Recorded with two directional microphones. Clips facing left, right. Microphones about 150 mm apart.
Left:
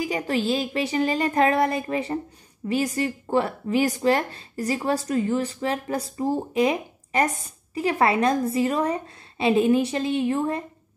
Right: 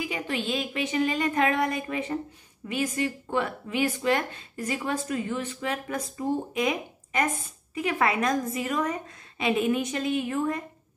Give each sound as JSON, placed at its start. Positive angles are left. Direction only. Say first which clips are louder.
{"t": 0.0, "sound": "speech", "louder": "left 6 dB", "side_deg": 35}